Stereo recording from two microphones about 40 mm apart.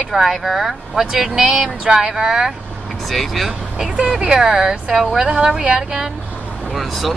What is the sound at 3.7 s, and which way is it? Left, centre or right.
Speech, centre.